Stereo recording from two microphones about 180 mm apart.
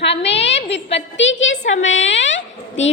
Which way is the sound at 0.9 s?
90° left.